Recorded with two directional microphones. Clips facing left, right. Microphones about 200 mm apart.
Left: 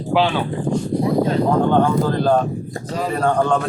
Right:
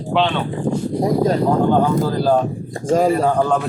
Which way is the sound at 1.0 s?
40° right (ahead or behind).